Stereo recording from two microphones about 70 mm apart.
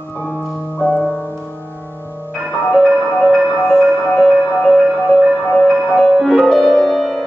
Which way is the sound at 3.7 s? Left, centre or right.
Centre.